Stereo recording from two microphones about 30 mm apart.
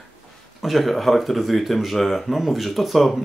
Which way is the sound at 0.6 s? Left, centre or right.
Centre.